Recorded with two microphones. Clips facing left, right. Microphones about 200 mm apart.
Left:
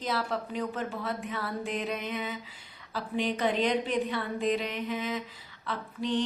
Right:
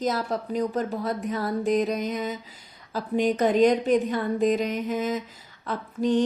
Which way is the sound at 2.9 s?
45° right (ahead or behind).